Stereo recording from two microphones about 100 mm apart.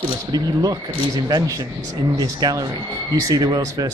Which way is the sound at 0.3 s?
40° right (ahead or behind).